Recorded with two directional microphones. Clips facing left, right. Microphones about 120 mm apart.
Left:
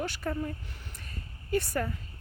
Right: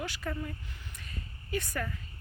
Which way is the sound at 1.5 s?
35° left (ahead or behind).